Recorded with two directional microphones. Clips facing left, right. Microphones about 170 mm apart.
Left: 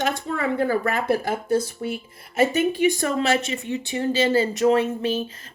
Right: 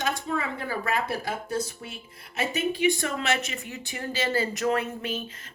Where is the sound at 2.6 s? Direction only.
40° left (ahead or behind).